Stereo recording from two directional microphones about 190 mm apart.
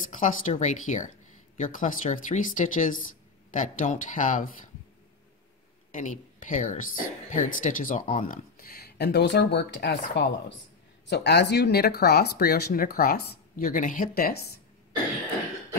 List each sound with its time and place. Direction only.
0.1 s speech: 40° left (ahead or behind)
5.9 s speech: 40° left (ahead or behind)